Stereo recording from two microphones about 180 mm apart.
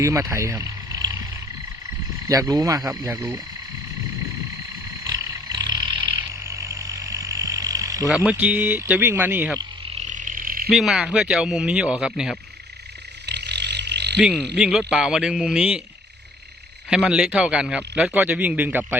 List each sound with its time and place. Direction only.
0.0 s speech: 15° right (ahead or behind)
2.2 s a man's voice: 20° right (ahead or behind)
5.0 s roaring cats: 15° right (ahead or behind)
8.1 s a man's voice: 5° right (ahead or behind)
9.6 s frog: 35° right (ahead or behind); by 10.7 s 55° right (ahead or behind)
10.7 s speech: centre (ahead or behind)
13.2 s roaring cats: 70° right (ahead or behind)
14.5 s speech: centre (ahead or behind)
17.1 s a man's voice: 5° right (ahead or behind)